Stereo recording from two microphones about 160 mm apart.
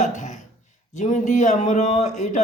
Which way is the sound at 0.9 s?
50° left (ahead or behind).